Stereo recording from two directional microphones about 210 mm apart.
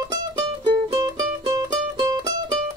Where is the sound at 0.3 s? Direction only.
20° right (ahead or behind).